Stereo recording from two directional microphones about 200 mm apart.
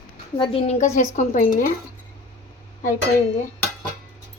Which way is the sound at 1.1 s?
40° left (ahead or behind).